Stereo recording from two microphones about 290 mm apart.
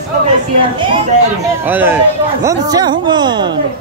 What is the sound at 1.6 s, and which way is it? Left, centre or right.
Speech, centre.